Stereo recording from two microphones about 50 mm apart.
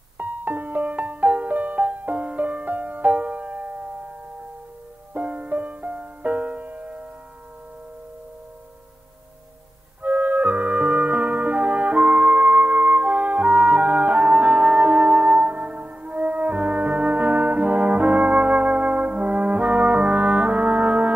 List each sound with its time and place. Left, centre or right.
0.2 s music: right
5.1 s music: right
10.0 s music: right